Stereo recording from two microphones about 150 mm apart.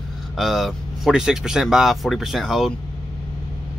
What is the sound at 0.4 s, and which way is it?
Speech, centre (ahead or behind).